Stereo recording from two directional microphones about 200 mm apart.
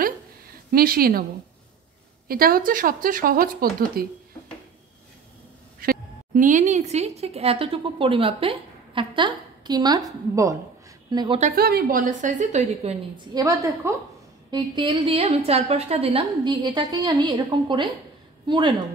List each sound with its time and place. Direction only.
0.7 s speech: 45° right (ahead or behind)
2.2 s speech: 45° right (ahead or behind)
5.8 s a woman's voice: 45° right (ahead or behind); by 11.3 s 20° right (ahead or behind)
11.5 s a woman's voice: 50° right (ahead or behind)
13.1 s a woman's voice: 20° right (ahead or behind)